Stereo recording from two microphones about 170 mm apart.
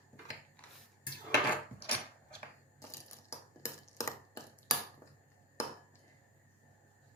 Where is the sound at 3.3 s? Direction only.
15° left (ahead or behind).